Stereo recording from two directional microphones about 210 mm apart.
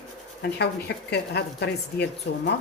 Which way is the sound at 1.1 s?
55° left (ahead or behind).